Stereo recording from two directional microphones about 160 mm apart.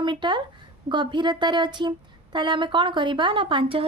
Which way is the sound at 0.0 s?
30° right (ahead or behind).